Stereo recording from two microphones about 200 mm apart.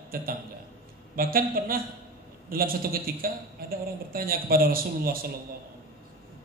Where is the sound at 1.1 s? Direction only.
45° right (ahead or behind).